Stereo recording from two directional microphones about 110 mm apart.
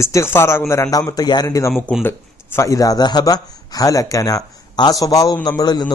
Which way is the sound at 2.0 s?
20° left (ahead or behind).